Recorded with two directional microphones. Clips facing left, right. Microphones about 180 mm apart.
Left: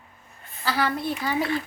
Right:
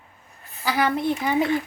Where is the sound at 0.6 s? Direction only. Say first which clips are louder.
Right 3 dB; 15° right (ahead or behind).